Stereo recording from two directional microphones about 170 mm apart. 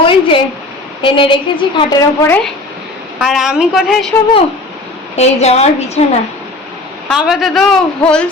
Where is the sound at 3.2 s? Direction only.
5° right (ahead or behind).